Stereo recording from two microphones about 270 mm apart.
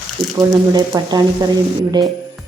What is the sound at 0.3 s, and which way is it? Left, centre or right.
A woman's voice, centre.